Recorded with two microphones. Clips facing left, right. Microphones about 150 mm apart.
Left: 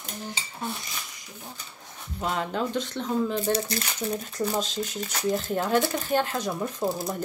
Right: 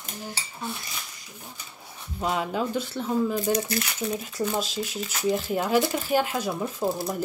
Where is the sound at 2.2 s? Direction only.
5° right (ahead or behind).